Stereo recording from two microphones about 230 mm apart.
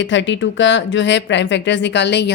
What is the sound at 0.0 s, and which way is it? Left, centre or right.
Speech, left.